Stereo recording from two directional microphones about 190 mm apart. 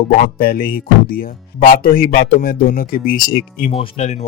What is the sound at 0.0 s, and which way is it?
Speech, 50° left (ahead or behind).